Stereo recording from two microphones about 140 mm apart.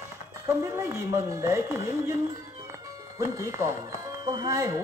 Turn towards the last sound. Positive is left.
turn(degrees=-25)  # may be behind; listen again after turning